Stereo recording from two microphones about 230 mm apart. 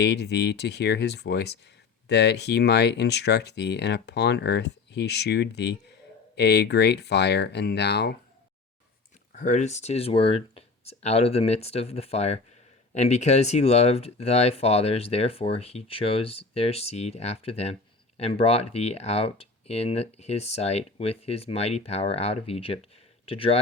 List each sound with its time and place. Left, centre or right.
0.0 s speech: left
9.3 s speech: left